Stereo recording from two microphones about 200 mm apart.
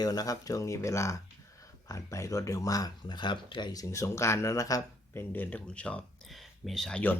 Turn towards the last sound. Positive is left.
turn(degrees=5)  # may be behind; listen again after turning